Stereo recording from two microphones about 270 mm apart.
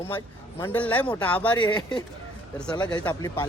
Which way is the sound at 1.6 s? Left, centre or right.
Centre.